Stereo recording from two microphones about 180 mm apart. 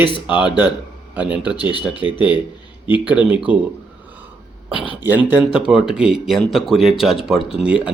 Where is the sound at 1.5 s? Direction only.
25° left (ahead or behind).